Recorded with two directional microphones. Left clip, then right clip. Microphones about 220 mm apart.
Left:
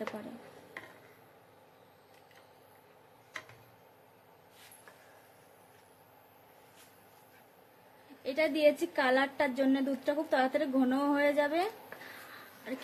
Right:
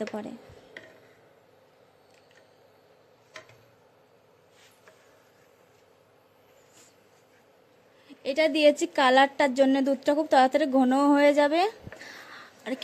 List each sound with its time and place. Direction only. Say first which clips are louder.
8.2 s a woman's voice: right 6 dB; 35° right (ahead or behind)